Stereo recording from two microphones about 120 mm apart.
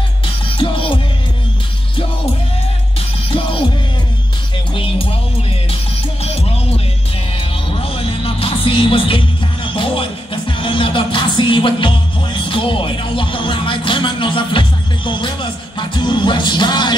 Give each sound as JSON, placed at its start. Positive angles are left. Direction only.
{"t": 0.5, "sound": "music", "side_deg": 45}
{"t": 3.3, "sound": "music", "side_deg": 45}
{"t": 4.7, "sound": "music", "side_deg": 50}
{"t": 6.2, "sound": "music", "side_deg": 55}
{"t": 7.8, "sound": "music", "side_deg": 50}